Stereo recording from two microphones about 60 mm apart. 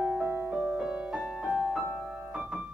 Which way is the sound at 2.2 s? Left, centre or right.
Right.